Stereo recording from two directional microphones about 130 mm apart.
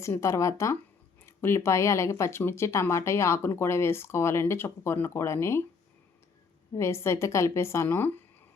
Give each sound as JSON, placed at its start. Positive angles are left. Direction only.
{"t": 0.0, "sound": "speech", "side_deg": 20}
{"t": 6.7, "sound": "speech", "side_deg": 20}